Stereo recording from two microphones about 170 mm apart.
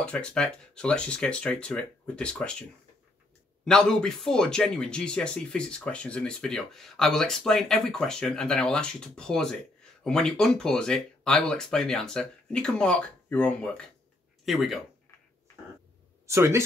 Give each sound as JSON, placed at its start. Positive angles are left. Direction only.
{"t": 0.0, "sound": "speech", "side_deg": 5}
{"t": 3.6, "sound": "speech", "side_deg": 5}
{"t": 16.3, "sound": "speech", "side_deg": -15}